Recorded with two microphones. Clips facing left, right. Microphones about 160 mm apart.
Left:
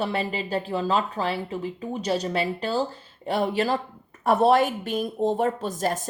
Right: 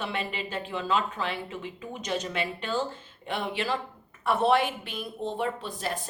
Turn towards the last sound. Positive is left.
turn(degrees=45)  # may be behind; listen again after turning